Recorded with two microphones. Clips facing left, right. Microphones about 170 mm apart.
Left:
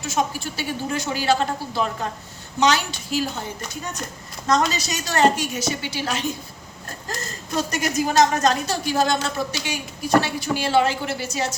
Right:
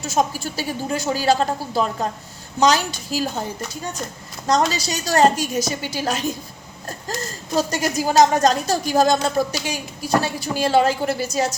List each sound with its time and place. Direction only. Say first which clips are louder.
0.0 s a woman's voice: right 3 dB; 40° right (ahead or behind)
4.4 s a woman's voice: right 2 dB; 35° right (ahead or behind)
7.5 s a woman's voice: right 2 dB; 35° right (ahead or behind)